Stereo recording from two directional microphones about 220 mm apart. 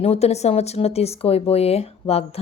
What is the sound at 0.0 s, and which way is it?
Speech, 30° left (ahead or behind).